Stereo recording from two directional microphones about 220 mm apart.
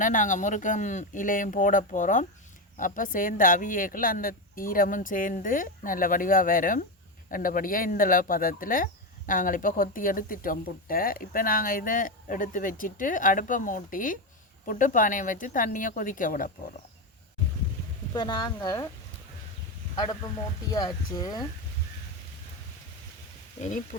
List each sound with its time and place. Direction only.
0.0 s speech: 35° left (ahead or behind)
18.1 s speech: 20° left (ahead or behind)
20.7 s speech: 15° left (ahead or behind)
23.6 s speech: 35° left (ahead or behind)